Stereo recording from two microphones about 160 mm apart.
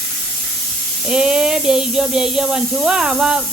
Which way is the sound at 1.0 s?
5° right (ahead or behind).